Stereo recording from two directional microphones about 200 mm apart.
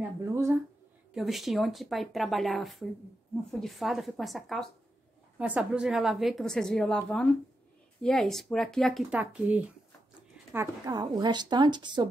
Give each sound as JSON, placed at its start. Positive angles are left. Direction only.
{"t": 0.2, "sound": "speech", "side_deg": -15}
{"t": 1.1, "sound": "a woman's voice", "side_deg": 0}